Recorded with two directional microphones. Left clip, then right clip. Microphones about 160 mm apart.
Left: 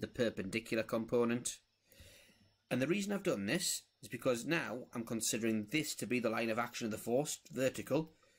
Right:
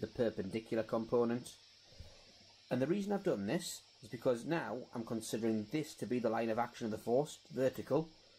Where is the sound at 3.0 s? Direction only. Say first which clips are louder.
Right 1 dB; 15° left (ahead or behind).